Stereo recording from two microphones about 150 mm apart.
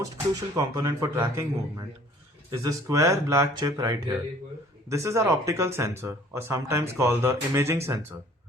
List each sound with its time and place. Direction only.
0.0 s speech: 20° right (ahead or behind)